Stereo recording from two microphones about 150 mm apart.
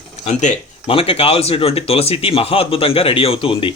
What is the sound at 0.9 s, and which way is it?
Speech, 40° left (ahead or behind).